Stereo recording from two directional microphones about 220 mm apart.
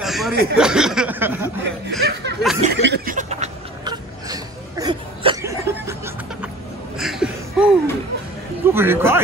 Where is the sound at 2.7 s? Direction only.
50° right (ahead or behind).